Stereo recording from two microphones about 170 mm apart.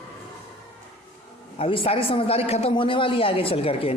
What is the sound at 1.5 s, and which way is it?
Speech, 30° left (ahead or behind).